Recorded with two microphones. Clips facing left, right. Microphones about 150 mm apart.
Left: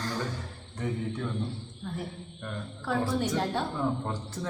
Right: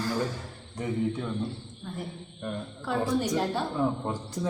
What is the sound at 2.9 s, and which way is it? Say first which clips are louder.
Speech: right 1 dB; 5° left (ahead or behind).